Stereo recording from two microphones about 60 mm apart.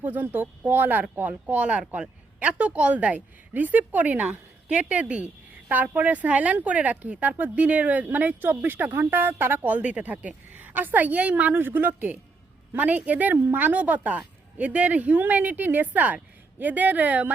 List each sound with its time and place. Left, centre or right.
0.0 s speech: right